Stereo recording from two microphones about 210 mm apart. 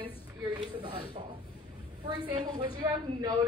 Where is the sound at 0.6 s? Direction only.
20° right (ahead or behind).